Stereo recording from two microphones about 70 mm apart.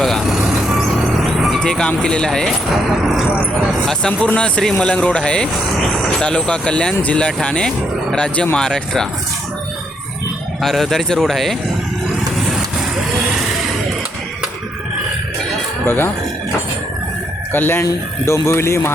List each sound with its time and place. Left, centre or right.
0.0 s speech: centre
1.2 s vehicle: centre
1.5 s speech: centre
4.2 s speech: centre
10.6 s a man's voice: centre
15.9 s speech: left
17.5 s speech: left
17.8 s speech: left